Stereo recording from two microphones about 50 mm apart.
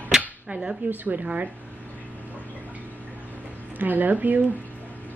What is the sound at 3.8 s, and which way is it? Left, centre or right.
Speech, right.